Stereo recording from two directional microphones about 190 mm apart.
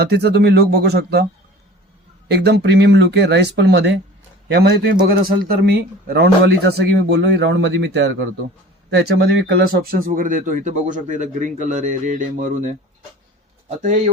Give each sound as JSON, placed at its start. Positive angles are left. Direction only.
{"t": 0.0, "sound": "speech", "side_deg": -60}
{"t": 2.2, "sound": "speech", "side_deg": -60}
{"t": 11.7, "sound": "a sound", "side_deg": -40}